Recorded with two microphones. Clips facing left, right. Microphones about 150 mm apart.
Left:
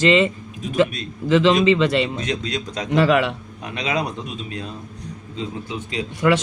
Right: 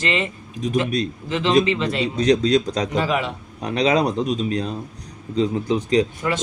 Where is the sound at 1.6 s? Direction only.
90° left.